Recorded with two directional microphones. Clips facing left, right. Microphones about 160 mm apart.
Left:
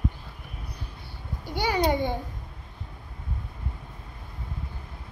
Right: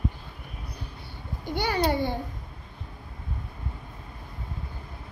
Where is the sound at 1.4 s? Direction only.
10° left (ahead or behind).